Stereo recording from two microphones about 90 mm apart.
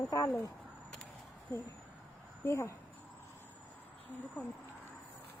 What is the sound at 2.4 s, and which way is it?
Speech, 30° left (ahead or behind).